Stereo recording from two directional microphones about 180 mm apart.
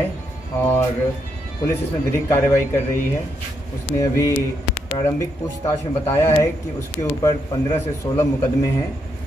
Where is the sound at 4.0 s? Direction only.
20° left (ahead or behind).